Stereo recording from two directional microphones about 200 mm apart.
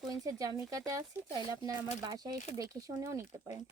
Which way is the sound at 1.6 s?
20° right (ahead or behind).